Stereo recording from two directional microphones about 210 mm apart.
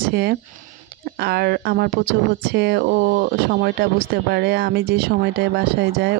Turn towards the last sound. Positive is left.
turn(degrees=-50)  # may be behind; listen again after turning